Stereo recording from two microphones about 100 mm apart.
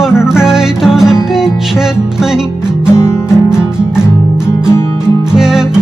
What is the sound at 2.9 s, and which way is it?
Music, 25° left (ahead or behind).